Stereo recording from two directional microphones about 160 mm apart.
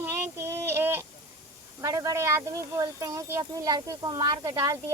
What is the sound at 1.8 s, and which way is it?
Speech, 20° right (ahead or behind).